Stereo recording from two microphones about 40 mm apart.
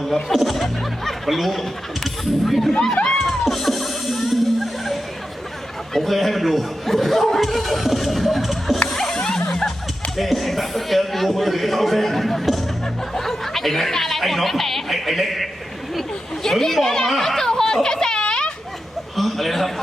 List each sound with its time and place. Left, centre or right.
0.3 s music: centre
2.5 s a man's voice: centre
2.8 s a sound: centre
3.4 s music: centre
5.9 s a man's voice: centre
8.9 s music: centre
10.2 s a man's voice: centre
16.0 s a sound: centre
17.8 s a child's voice: centre
18.2 s children playing: left
19.1 s a man's voice: centre